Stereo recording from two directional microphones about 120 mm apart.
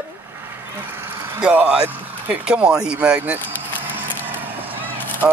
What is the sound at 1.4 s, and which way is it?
Speech, 10° right (ahead or behind).